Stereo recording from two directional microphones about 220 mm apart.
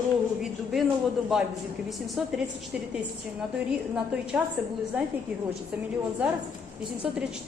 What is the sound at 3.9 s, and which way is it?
Speech, 5° right (ahead or behind).